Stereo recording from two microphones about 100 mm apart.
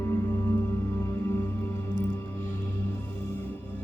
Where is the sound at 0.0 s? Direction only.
30° left (ahead or behind).